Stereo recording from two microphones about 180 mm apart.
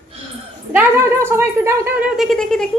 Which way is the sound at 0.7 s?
15° right (ahead or behind).